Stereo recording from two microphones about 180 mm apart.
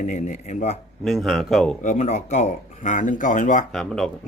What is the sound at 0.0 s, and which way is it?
Speech, 45° left (ahead or behind).